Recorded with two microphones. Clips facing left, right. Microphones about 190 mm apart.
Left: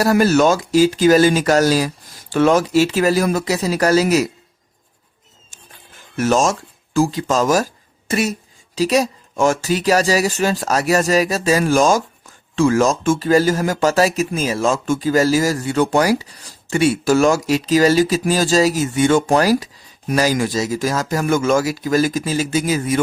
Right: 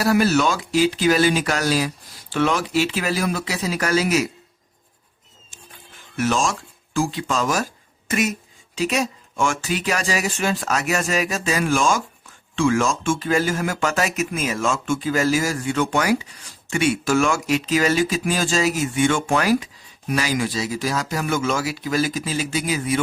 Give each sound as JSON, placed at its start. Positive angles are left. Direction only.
{"t": 0.0, "sound": "speech", "side_deg": 45}
{"t": 6.1, "sound": "speech", "side_deg": 45}